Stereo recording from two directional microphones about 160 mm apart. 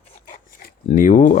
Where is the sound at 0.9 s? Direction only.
55° left (ahead or behind).